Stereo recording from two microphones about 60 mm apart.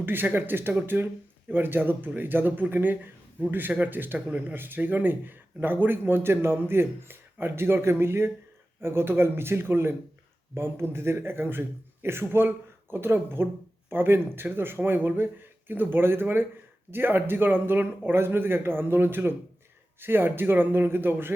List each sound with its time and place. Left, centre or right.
0.0 s speech: right